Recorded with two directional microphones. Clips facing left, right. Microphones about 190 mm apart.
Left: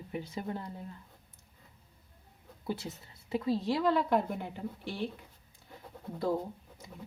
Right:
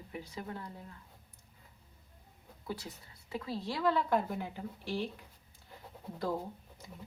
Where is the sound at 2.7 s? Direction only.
25° left (ahead or behind).